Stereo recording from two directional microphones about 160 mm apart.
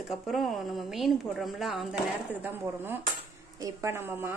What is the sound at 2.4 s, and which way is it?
A woman's voice, 15° right (ahead or behind).